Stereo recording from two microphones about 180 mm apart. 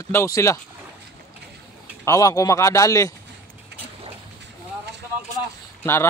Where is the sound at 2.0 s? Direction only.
15° left (ahead or behind).